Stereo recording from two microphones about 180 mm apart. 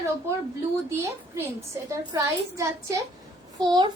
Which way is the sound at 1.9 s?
15° right (ahead or behind).